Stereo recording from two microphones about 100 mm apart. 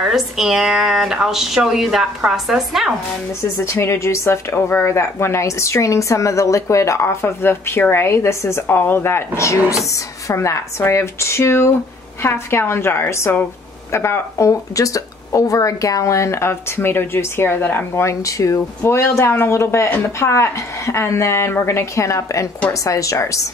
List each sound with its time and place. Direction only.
0.0 s a woman's voice: 5° right (ahead or behind)
3.4 s a woman's voice: 25° left (ahead or behind)